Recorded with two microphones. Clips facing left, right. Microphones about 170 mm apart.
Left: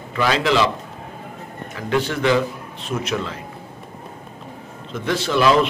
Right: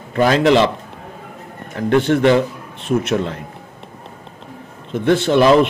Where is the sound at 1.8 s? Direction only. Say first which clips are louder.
Right 7 dB; 55° right (ahead or behind).